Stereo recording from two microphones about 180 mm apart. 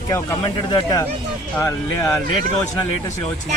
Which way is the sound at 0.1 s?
20° left (ahead or behind).